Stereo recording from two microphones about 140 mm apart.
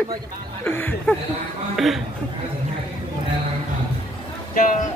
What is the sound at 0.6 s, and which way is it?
Chuckle, 15° left (ahead or behind).